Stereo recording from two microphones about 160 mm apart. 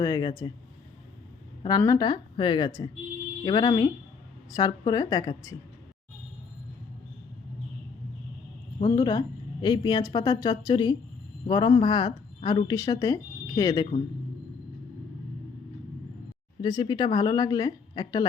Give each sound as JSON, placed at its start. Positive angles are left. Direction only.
{"t": 0.0, "sound": "a woman's voice", "side_deg": 25}
{"t": 1.6, "sound": "a woman's voice", "side_deg": 20}
{"t": 8.8, "sound": "a woman's voice", "side_deg": 25}
{"t": 16.6, "sound": "a woman's voice", "side_deg": 30}